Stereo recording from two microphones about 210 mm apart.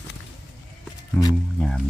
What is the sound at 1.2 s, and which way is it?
Music, 5° left (ahead or behind).